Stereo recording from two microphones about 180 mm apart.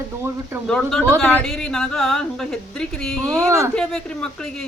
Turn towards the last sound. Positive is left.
turn(degrees=5)  # may be behind; listen again after turning